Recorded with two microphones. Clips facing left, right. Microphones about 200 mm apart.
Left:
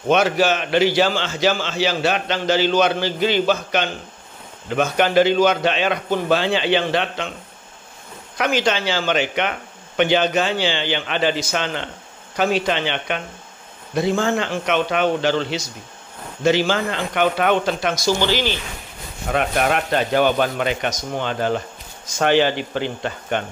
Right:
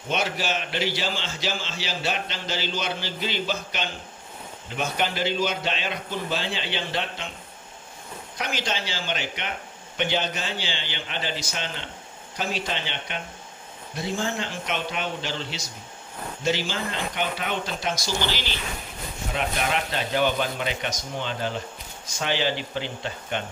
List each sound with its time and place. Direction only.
0.2 s a man's voice: 75° left (ahead or behind)
8.4 s a man's voice: 80° left; by 23.4 s 55° left (ahead or behind)